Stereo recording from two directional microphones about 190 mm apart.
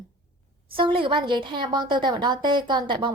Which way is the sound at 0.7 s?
25° right (ahead or behind).